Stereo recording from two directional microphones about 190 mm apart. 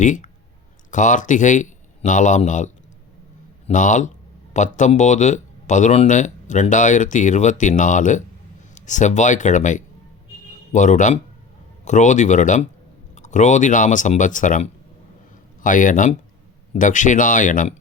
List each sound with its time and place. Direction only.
0.0 s a man's voice: 40° left (ahead or behind)